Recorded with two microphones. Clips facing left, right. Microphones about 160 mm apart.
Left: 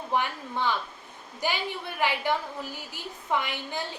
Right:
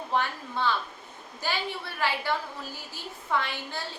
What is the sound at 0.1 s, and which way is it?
A woman's voice, 15° left (ahead or behind).